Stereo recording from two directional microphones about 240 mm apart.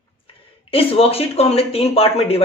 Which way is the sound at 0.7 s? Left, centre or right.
Left.